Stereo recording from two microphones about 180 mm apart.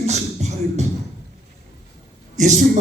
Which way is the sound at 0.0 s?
40° right (ahead or behind).